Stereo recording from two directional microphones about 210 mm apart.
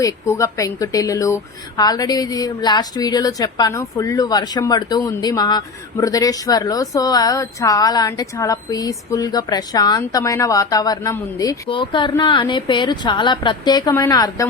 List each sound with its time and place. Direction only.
0.0 s a woman's voice: 15° left (ahead or behind)